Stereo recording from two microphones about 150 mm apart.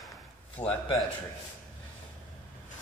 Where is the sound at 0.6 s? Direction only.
35° left (ahead or behind).